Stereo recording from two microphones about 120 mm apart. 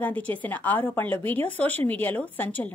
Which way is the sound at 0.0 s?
15° left (ahead or behind).